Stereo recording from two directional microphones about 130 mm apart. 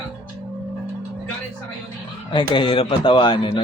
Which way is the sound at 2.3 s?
40° left (ahead or behind).